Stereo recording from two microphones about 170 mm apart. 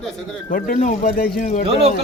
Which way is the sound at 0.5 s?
55° left (ahead or behind).